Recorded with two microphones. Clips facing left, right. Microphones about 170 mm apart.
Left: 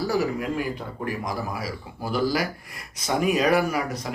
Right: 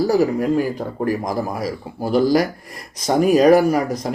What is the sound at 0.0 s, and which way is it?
Speech, 40° right (ahead or behind).